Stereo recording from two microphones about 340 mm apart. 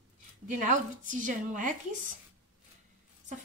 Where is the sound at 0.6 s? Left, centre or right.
Right.